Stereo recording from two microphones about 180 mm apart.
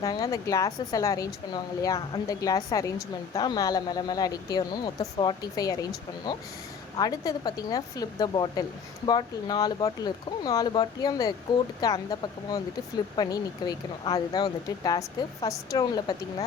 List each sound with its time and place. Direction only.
0.0 s speech: 20° left (ahead or behind)